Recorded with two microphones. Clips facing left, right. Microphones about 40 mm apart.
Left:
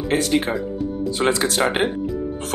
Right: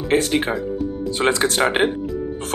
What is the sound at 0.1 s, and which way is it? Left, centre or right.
Speech, right.